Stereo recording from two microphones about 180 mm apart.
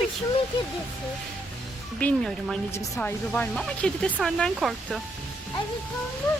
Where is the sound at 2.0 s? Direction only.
5° left (ahead or behind).